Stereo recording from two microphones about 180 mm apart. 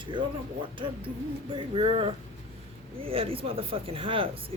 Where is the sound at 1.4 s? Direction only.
30° right (ahead or behind).